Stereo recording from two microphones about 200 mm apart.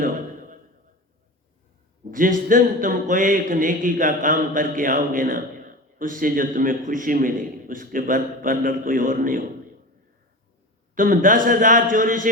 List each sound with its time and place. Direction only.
0.0 s a sound: 45° right (ahead or behind)
2.0 s a man's voice: 45° right (ahead or behind)
10.9 s a man's voice: 45° right (ahead or behind)